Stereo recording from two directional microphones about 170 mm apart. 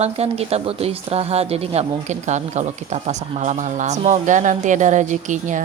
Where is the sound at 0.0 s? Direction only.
35° right (ahead or behind).